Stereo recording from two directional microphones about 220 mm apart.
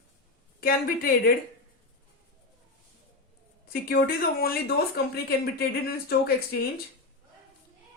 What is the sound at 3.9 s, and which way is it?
Speech, 40° left (ahead or behind).